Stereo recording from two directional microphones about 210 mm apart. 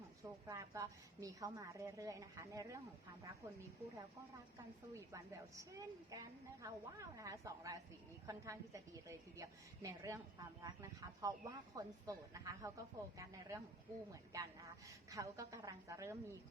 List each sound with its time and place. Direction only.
0.4 s speech: 15° right (ahead or behind)